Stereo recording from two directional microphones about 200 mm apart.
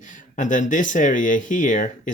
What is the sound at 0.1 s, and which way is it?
Speech, 40° left (ahead or behind).